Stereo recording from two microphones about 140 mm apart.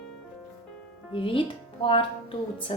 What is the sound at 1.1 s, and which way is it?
Speech, 40° left (ahead or behind).